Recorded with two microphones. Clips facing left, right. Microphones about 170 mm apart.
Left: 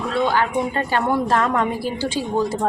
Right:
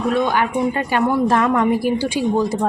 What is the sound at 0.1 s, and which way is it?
A woman's voice, 15° right (ahead or behind).